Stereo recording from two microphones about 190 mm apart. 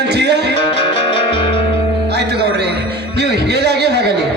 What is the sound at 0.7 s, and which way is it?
Music, 30° left (ahead or behind).